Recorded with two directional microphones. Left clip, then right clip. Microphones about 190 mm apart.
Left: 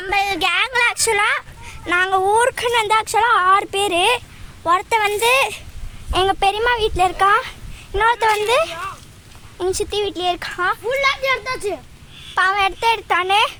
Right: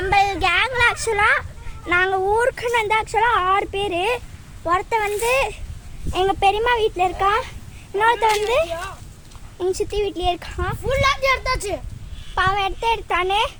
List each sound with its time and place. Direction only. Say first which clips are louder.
0.0 s a child's voice: right 1 dB; 10° left (ahead or behind)
10.8 s a child's voice: right 3 dB; 60° right (ahead or behind)
12.3 s a child's voice: left 3 dB; 10° left (ahead or behind)